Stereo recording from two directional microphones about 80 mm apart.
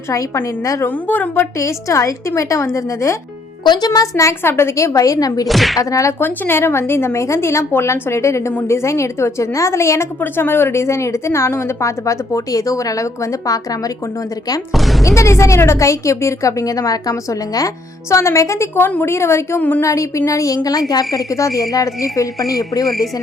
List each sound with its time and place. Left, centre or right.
0.4 s a woman's voice: left
0.9 s a woman's voice: left
1.5 s a woman's voice: left
3.6 s a child's voice: left
4.1 s a woman's voice: left
5.5 s speech: centre
5.8 s speech: left
6.1 s a woman's voice: left
14.7 s speech: centre
15.0 s a woman's voice: left
18.1 s a woman's voice: left
18.9 s a woman's voice: left
19.1 s a woman's voice: left
21.2 s a woman's voice: left